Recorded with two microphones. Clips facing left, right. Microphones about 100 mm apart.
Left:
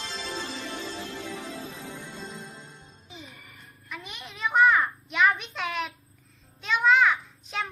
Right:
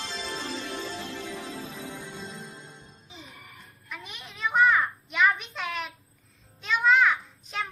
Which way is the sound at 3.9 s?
Centre (ahead or behind).